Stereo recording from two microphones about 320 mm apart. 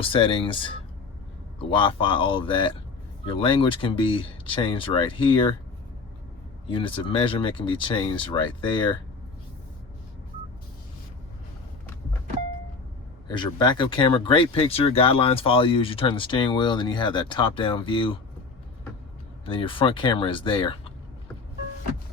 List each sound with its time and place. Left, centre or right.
0.0 s speech: centre
6.7 s speech: centre
13.2 s speech: centre
19.5 s speech: centre